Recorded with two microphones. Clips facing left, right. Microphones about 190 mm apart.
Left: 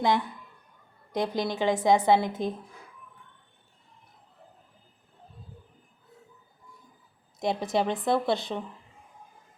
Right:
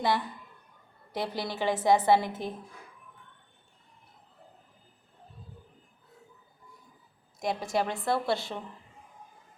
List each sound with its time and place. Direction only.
1.1 s a woman's voice: 15° left (ahead or behind)
7.3 s a woman's voice: 20° left (ahead or behind)